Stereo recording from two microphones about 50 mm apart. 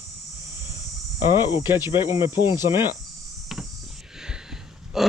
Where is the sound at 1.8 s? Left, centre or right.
Right.